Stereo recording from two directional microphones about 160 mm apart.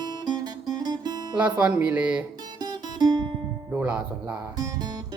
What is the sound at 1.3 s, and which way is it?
Speech, 10° right (ahead or behind).